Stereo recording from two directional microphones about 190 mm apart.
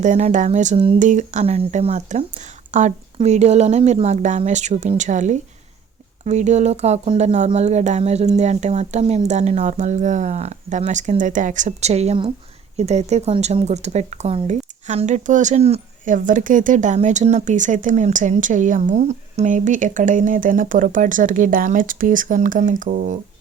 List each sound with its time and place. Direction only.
0.0 s speech: 40° right (ahead or behind)